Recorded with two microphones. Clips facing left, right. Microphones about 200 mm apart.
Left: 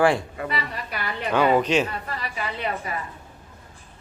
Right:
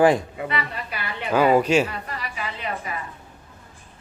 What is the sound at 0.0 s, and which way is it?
Speech, 20° right (ahead or behind).